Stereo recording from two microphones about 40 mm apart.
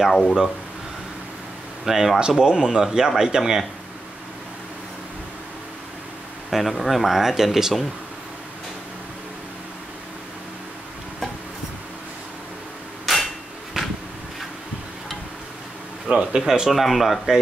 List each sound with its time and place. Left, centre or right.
0.1 s speech: centre
1.9 s speech: centre
6.5 s speech: centre
13.0 s hammer: centre
13.8 s a sound: centre
16.1 s speech: right
16.7 s speech: centre